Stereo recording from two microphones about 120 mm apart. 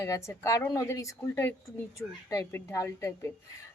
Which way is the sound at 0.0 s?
25° left (ahead or behind).